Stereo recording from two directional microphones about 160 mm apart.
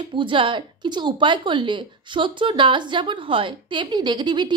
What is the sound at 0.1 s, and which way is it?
Speech, 30° right (ahead or behind).